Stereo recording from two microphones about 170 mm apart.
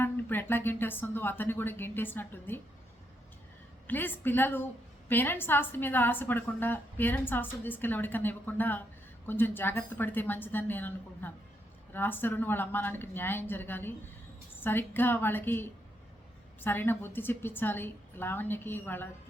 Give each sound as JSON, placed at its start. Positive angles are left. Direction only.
{"t": 0.0, "sound": "a woman's voice", "side_deg": 10}
{"t": 3.8, "sound": "a woman's voice", "side_deg": 10}